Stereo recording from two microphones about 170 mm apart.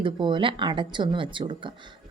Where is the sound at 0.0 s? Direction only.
30° right (ahead or behind).